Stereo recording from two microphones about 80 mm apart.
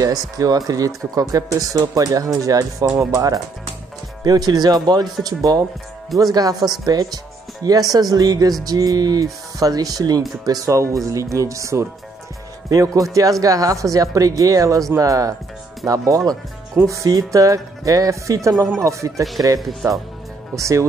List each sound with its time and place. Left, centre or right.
0.0 s speech: right